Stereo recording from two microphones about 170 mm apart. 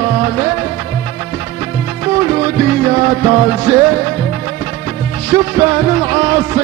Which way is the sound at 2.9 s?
30° right (ahead or behind).